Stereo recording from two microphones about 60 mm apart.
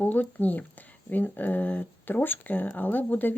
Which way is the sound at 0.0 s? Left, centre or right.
Left.